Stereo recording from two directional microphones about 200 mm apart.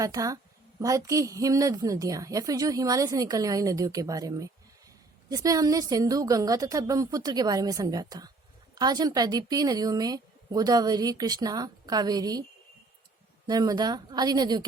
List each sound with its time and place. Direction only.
0.0 s a woman's voice: 15° right (ahead or behind)
13.5 s a woman's voice: 20° right (ahead or behind)